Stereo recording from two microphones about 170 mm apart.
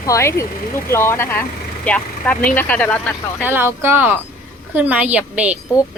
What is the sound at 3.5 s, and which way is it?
A woman's voice, 15° right (ahead or behind).